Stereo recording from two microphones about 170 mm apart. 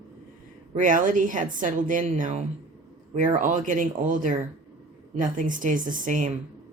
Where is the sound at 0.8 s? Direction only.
50° right (ahead or behind).